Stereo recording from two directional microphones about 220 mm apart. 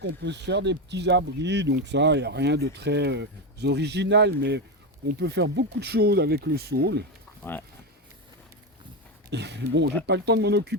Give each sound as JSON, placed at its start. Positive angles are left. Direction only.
{"t": 0.0, "sound": "speech", "side_deg": -50}
{"t": 9.3, "sound": "speech", "side_deg": -50}